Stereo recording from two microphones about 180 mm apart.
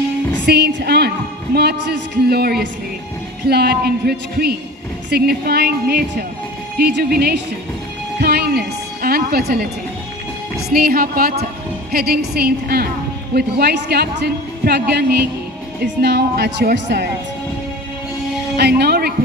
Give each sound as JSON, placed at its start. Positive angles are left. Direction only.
{"t": 0.5, "sound": "a woman's voice", "side_deg": -65}
{"t": 10.7, "sound": "a woman's voice", "side_deg": -55}
{"t": 18.6, "sound": "a woman's voice", "side_deg": -65}